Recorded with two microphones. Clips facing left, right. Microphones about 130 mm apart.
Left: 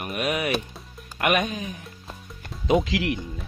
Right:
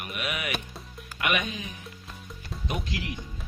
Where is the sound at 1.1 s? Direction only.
50° left (ahead or behind).